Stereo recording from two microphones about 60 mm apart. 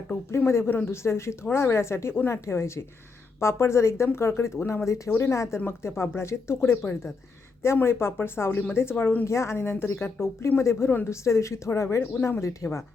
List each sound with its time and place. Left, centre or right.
0.3 s speech: left
9.2 s speech: left